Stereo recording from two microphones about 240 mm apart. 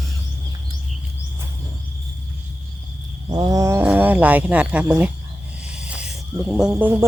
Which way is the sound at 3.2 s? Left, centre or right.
Centre.